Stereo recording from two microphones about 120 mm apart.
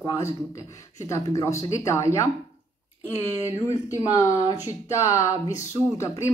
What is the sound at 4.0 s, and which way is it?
Speech, 25° left (ahead or behind).